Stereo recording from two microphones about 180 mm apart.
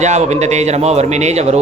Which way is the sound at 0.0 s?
40° right (ahead or behind).